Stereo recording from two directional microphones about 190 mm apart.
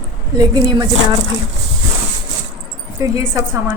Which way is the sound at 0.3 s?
20° right (ahead or behind).